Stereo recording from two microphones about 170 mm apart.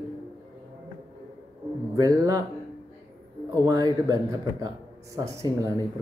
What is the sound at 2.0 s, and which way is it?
Speech, 20° right (ahead or behind).